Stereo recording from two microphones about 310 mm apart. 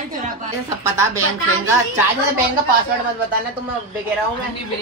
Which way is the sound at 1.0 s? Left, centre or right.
Centre.